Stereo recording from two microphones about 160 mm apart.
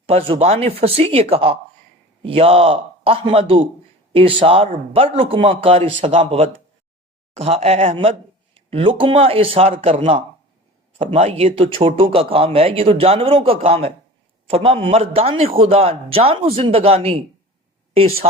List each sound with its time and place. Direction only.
0.3 s speech: 40° right (ahead or behind)